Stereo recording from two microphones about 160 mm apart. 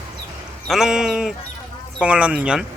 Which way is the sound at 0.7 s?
5° right (ahead or behind).